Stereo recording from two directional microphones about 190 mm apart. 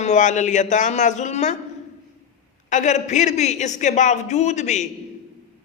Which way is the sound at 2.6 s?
40° left (ahead or behind).